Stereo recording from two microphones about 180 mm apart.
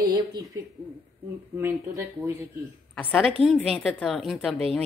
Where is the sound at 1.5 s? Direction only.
15° right (ahead or behind).